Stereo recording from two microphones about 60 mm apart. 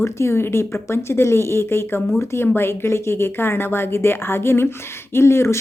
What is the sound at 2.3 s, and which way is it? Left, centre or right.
A woman's voice, left.